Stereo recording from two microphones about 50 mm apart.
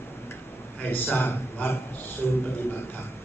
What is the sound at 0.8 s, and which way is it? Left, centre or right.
Speech, left.